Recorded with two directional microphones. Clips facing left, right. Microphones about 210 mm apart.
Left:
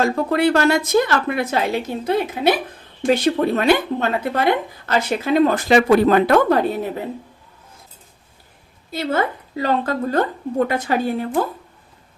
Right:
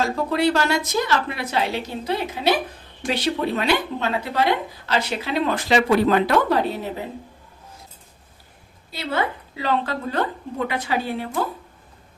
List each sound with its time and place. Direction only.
0.0 s speech: 55° left (ahead or behind)
8.9 s speech: 45° left (ahead or behind)